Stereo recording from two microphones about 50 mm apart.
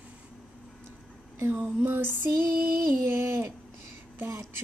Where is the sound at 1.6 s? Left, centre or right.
Right.